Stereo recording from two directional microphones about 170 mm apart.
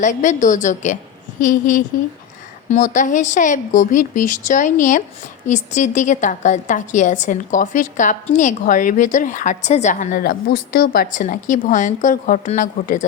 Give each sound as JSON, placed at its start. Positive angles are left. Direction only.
{"t": 0.0, "sound": "a woman's voice", "side_deg": 45}